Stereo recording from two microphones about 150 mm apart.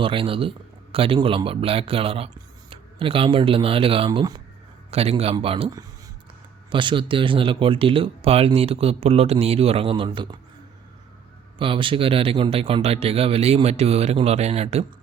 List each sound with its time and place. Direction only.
0.0 s speech: 35° right (ahead or behind)
11.5 s speech: 35° right (ahead or behind)